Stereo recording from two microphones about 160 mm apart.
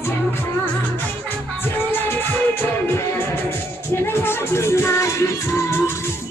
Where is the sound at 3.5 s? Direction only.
15° left (ahead or behind).